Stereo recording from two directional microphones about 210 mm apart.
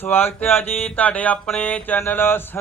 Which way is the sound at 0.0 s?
10° left (ahead or behind).